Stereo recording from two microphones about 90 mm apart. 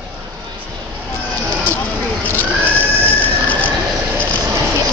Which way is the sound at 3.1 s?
20° left (ahead or behind).